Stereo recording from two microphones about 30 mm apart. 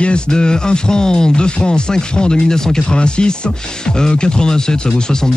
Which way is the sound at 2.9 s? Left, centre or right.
Left.